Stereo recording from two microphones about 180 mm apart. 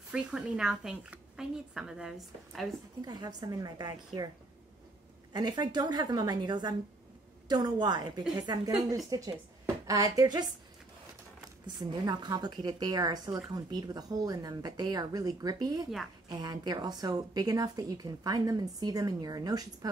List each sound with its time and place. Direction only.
0.1 s a woman's voice: 5° right (ahead or behind)
3.0 s a woman's voice: 20° right (ahead or behind)
5.3 s a woman's voice: 25° right (ahead or behind)
11.6 s a woman's voice: 25° right (ahead or behind)